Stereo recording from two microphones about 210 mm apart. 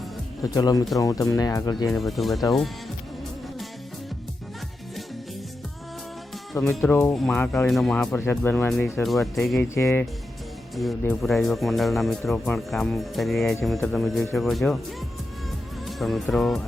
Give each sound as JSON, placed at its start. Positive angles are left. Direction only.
{"t": 0.5, "sound": "speech", "side_deg": 15}
{"t": 1.9, "sound": "speech", "side_deg": 0}
{"t": 6.5, "sound": "speech", "side_deg": 5}
{"t": 9.0, "sound": "speech", "side_deg": 0}
{"t": 9.7, "sound": "speech", "side_deg": 10}
{"t": 15.9, "sound": "speech", "side_deg": 0}